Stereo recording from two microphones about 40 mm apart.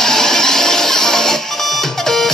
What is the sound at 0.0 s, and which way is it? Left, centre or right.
Music, centre.